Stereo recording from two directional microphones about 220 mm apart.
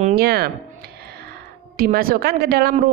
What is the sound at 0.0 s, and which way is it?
Speech, 45° right (ahead or behind).